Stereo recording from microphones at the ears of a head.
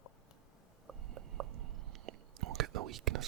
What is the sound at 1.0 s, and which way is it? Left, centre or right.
Whispering, right.